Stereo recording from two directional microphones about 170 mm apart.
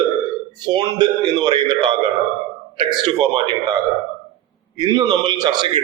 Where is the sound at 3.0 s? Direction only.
30° right (ahead or behind).